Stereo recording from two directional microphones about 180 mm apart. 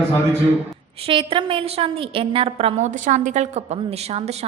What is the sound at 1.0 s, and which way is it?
A woman's voice, 30° right (ahead or behind).